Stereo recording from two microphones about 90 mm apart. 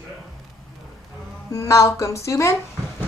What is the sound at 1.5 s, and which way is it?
A woman's voice, 35° left (ahead or behind).